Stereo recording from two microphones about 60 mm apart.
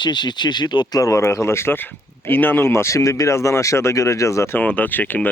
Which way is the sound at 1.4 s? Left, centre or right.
Left.